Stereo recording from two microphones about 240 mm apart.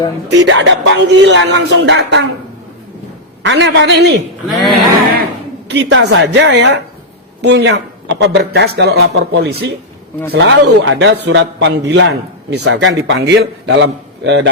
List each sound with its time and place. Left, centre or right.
0.3 s a man's voice: right
3.4 s a man's voice: right
4.4 s speech: centre
5.6 s a woman's voice: right